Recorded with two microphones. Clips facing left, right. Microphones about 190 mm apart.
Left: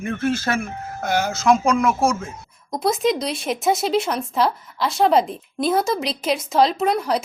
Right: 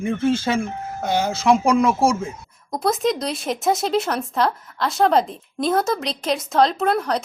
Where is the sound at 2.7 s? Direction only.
Centre (ahead or behind).